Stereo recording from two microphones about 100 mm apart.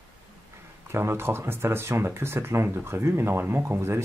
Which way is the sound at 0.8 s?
25° right (ahead or behind).